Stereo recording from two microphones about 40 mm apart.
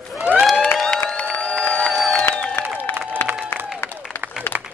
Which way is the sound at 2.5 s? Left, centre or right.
Left.